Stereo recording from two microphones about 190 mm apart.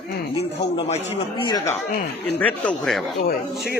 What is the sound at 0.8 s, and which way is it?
Speech, 35° left (ahead or behind).